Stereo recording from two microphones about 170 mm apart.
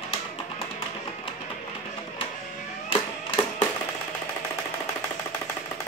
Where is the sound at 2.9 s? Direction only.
30° left (ahead or behind).